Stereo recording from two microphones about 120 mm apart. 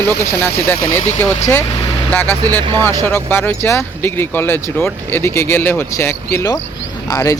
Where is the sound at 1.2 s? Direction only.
20° left (ahead or behind).